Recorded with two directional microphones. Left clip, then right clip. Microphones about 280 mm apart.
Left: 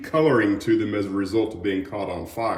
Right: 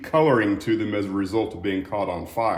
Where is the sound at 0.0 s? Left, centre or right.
Right.